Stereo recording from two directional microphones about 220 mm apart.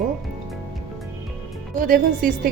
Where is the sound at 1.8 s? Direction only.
40° right (ahead or behind).